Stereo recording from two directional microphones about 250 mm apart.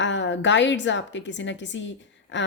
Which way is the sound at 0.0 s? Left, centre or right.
Left.